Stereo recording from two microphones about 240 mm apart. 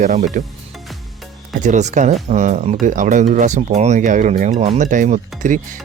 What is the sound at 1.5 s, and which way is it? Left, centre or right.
Speech, right.